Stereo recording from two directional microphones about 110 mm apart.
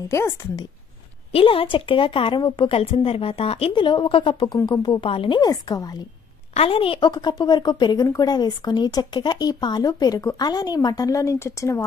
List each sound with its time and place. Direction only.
0.1 s a woman's voice: 25° left (ahead or behind)
1.3 s a woman's voice: 55° left (ahead or behind)
5.5 s speech: 35° left (ahead or behind)
6.5 s a woman's voice: 60° left (ahead or behind)
7.1 s speech: 40° left (ahead or behind)